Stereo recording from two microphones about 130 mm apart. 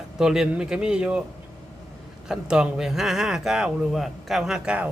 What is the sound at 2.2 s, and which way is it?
Speech, 5° right (ahead or behind).